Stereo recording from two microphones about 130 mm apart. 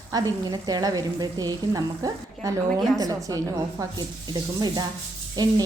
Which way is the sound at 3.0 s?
25° right (ahead or behind).